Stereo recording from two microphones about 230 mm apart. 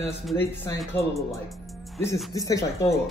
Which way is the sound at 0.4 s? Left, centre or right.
Centre.